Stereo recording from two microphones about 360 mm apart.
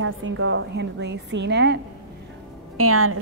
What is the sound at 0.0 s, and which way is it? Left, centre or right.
A woman's voice, right.